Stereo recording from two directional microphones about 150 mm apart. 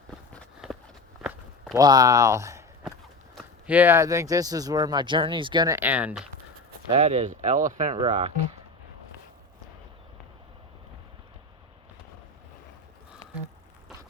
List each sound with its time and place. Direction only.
1.2 s walk: 5° right (ahead or behind)
1.7 s speech: 25° right (ahead or behind)
3.7 s speech: 10° right (ahead or behind); by 5.7 s 30° right (ahead or behind)
5.7 s speech: 10° right (ahead or behind)
6.9 s speech: 50° right (ahead or behind)
7.9 s speech: 35° right (ahead or behind)